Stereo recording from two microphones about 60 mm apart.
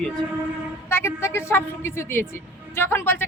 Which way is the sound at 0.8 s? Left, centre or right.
Left.